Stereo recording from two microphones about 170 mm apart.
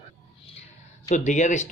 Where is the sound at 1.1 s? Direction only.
45° left (ahead or behind).